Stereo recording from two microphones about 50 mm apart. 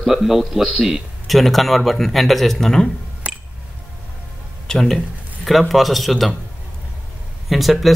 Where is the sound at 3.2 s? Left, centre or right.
Right.